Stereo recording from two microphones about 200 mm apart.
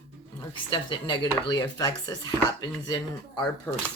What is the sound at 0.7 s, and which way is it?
Speech, 25° left (ahead or behind).